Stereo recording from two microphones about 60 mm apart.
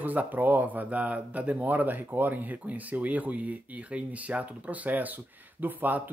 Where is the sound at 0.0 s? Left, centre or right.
Right.